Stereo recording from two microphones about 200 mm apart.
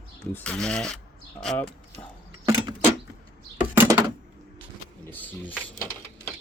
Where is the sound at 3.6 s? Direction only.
10° right (ahead or behind).